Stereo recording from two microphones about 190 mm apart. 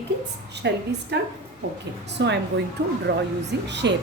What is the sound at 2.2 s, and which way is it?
Speech, 65° right (ahead or behind).